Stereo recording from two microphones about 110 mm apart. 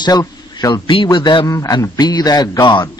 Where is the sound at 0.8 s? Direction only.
45° left (ahead or behind).